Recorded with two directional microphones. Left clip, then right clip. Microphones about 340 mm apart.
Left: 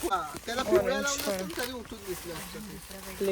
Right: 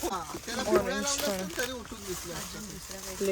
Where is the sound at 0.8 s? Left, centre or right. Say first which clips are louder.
Left 2 dB; centre.